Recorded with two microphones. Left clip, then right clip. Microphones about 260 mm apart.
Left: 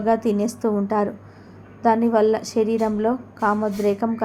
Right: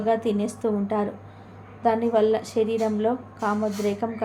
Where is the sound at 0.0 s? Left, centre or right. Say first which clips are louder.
Left 3 dB; centre.